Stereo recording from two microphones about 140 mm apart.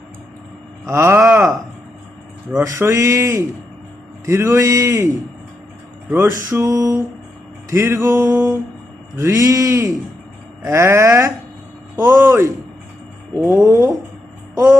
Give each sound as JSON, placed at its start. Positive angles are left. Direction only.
{"t": 0.9, "sound": "music", "side_deg": -20}
{"t": 2.6, "sound": "music", "side_deg": -20}
{"t": 6.3, "sound": "music", "side_deg": -20}